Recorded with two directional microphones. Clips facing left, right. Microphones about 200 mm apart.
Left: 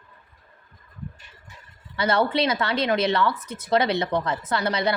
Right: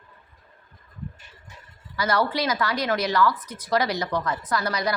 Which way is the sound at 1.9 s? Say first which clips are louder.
Left 2 dB; 25° left (ahead or behind).